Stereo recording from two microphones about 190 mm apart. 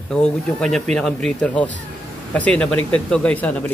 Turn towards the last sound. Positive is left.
turn(degrees=5)  # may be behind; listen again after turning